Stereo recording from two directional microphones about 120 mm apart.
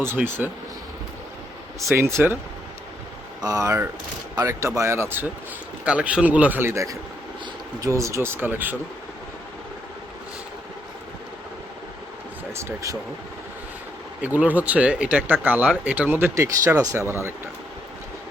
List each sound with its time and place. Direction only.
0.0 s speech: 20° right (ahead or behind)
1.8 s speech: 25° right (ahead or behind)
3.4 s speech: 30° right (ahead or behind)
12.5 s speech: 25° right (ahead or behind)
14.2 s speech: 15° right (ahead or behind)